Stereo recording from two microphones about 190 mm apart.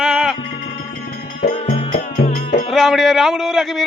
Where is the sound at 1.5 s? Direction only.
30° left (ahead or behind).